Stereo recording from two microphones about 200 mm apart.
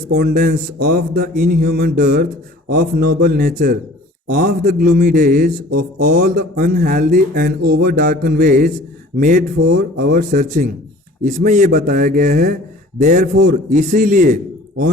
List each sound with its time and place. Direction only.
0.1 s speech: 50° right (ahead or behind)